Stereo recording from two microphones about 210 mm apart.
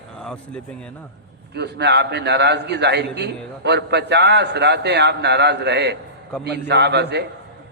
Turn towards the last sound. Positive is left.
turn(degrees=-55)  # may be behind; listen again after turning